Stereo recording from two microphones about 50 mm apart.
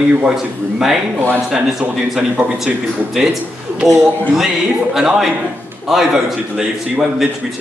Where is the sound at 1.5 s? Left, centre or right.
Centre.